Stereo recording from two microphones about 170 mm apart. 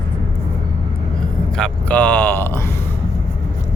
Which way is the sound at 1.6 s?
10° left (ahead or behind).